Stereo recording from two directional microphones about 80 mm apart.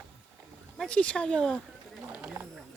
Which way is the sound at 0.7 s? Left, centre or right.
Centre.